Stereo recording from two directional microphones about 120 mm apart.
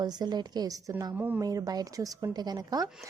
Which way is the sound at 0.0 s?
35° right (ahead or behind).